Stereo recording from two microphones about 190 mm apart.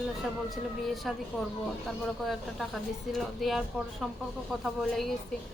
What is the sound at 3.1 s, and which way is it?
Speech, centre (ahead or behind).